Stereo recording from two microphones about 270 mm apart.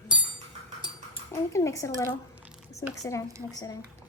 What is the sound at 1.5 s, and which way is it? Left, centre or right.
Speech, centre.